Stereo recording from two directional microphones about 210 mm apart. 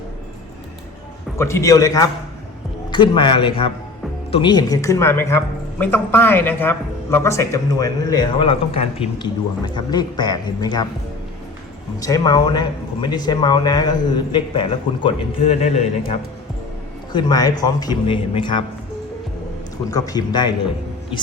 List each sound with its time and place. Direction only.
1.4 s a man's voice: 15° left (ahead or behind)
11.9 s a man's voice: 15° left (ahead or behind)
17.1 s a man's voice: 20° left (ahead or behind)
19.9 s a man's voice: 15° left (ahead or behind)